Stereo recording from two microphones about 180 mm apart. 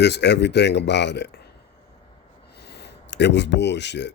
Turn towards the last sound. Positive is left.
turn(degrees=75)  # may be behind; listen again after turning